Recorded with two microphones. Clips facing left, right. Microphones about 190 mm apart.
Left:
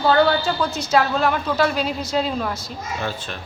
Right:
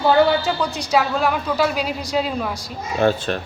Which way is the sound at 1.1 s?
5° right (ahead or behind).